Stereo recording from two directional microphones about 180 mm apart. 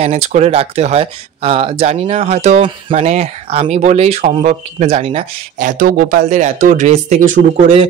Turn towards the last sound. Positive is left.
turn(degrees=-40)  # may be behind; listen again after turning